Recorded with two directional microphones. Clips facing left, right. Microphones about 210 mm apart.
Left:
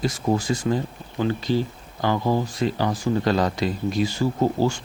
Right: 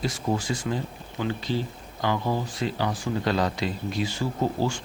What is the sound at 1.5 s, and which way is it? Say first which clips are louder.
Speech: left 5 dB; 45° left (ahead or behind).